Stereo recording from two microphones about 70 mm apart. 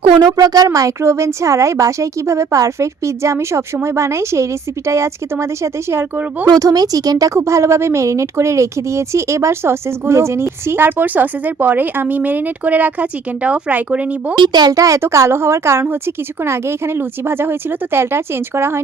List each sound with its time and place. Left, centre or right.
0.2 s speech: right
1.0 s a woman's voice: right
6.5 s speech: right
14.3 s speech: right
14.7 s speech: right